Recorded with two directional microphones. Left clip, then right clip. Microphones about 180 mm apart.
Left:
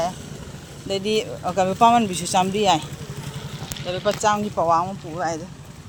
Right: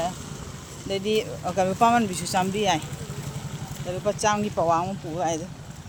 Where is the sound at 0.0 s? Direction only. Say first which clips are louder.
Left 4 dB; 15° left (ahead or behind).